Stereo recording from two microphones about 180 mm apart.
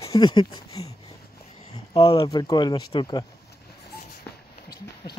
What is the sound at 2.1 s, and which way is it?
Speech, 20° left (ahead or behind).